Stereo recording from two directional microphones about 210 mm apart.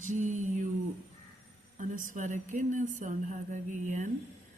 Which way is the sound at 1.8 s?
35° right (ahead or behind).